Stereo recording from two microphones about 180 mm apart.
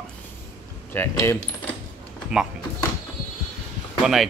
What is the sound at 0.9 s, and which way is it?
Keys jangling, 15° left (ahead or behind).